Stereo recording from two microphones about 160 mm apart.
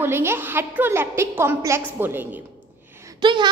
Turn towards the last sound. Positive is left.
turn(degrees=-30)  # may be behind; listen again after turning